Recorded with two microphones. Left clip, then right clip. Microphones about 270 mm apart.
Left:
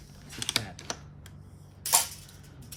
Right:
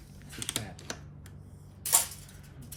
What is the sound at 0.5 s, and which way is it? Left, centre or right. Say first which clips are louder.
Typing: left 8 dB; centre.